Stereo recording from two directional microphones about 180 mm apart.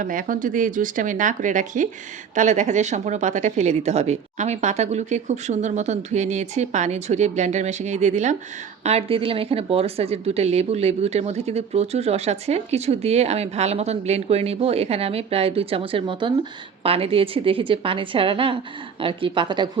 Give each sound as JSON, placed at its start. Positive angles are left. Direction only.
{"t": 0.0, "sound": "a woman's voice", "side_deg": -50}